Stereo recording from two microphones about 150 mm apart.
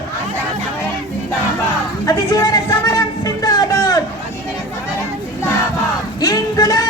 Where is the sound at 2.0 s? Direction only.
25° left (ahead or behind).